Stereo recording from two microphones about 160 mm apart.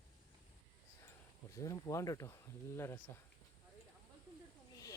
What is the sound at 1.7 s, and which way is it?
Speech, 20° left (ahead or behind).